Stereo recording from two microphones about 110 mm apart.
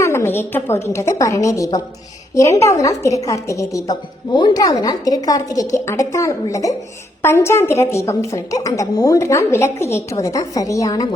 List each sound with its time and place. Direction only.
0.0 s a woman's voice: 25° left (ahead or behind)